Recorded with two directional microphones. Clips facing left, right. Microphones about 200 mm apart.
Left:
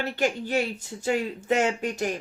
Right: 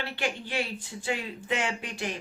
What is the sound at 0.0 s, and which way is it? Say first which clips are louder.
A woman's voice: left 6 dB; 45° left (ahead or behind).